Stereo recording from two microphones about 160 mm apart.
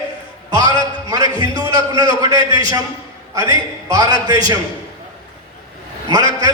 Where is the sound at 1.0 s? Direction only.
20° right (ahead or behind).